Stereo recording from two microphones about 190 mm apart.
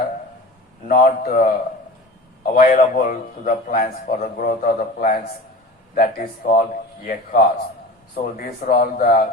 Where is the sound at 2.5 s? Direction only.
45° left (ahead or behind).